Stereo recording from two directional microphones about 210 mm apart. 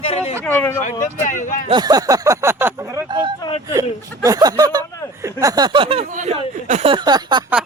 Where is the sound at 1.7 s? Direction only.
20° right (ahead or behind).